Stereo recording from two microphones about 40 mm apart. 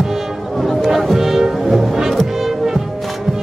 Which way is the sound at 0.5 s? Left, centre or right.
Centre.